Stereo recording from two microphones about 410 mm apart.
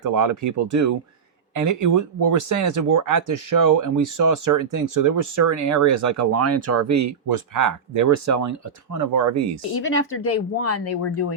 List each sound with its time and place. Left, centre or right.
0.0 s speech: right
9.7 s speech: left